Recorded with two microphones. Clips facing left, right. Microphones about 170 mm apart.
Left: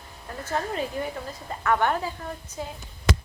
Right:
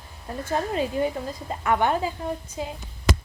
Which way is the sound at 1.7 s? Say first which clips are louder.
Right 1 dB; 15° right (ahead or behind).